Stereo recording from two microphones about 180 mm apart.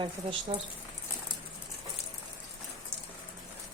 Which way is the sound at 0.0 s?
30° right (ahead or behind).